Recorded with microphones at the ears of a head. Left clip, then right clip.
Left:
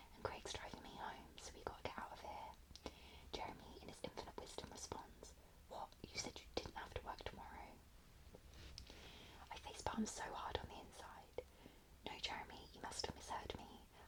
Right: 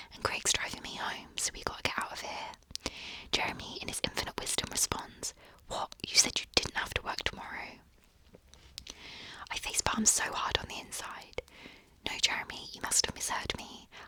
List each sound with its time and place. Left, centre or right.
0.0 s whispering: right